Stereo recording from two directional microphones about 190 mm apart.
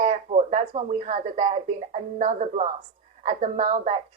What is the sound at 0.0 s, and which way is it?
A woman's voice, 35° right (ahead or behind).